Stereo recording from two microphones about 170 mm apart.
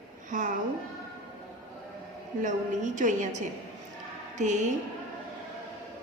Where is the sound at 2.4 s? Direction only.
50° right (ahead or behind).